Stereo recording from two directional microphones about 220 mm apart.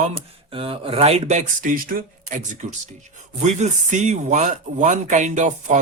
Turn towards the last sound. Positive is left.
turn(degrees=-35)  # may be behind; listen again after turning